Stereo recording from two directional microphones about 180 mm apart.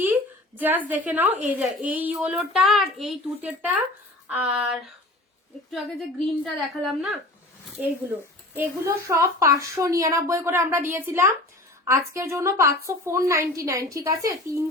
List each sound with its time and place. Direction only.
0.0 s a sound: 10° right (ahead or behind)
0.9 s a woman's voice: 10° right (ahead or behind)
8.5 s a woman's voice: 15° right (ahead or behind)